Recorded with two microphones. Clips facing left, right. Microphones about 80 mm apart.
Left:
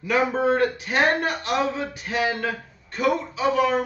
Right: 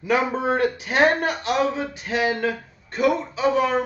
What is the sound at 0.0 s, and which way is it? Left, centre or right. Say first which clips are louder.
A man's voice: even; right.